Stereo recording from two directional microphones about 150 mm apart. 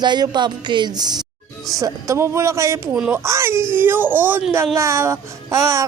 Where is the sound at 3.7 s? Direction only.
15° right (ahead or behind).